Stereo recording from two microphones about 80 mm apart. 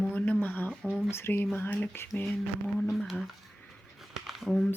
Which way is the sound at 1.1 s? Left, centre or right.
Left.